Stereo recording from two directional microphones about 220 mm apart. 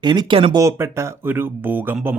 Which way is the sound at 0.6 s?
10° right (ahead or behind).